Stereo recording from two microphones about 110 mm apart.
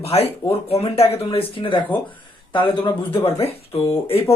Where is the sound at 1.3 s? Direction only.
55° left (ahead or behind).